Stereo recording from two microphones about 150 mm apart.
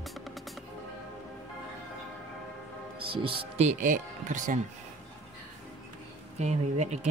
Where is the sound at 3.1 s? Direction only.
35° right (ahead or behind).